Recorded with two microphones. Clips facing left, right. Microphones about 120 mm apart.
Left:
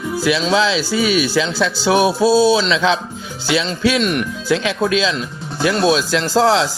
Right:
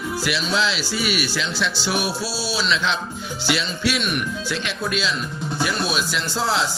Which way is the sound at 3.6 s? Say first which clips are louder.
Left 7 dB; 90° left.